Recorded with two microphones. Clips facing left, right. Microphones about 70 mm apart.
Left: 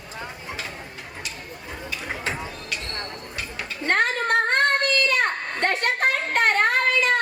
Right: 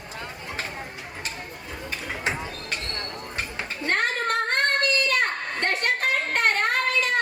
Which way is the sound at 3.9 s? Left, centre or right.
Left.